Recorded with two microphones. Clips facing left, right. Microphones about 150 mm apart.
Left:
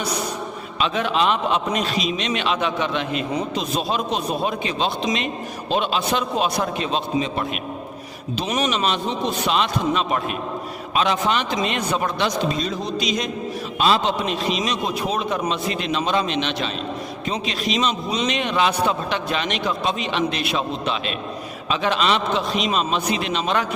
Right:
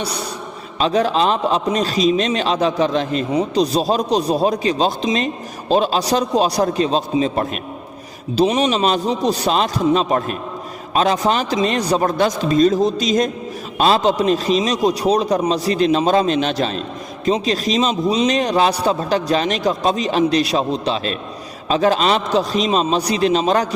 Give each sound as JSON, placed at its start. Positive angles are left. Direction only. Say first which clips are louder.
{"t": 0.0, "sound": "a man's voice", "louder": "even", "side_deg": -30}